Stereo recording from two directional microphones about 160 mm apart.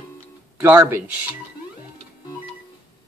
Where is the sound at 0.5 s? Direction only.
15° right (ahead or behind).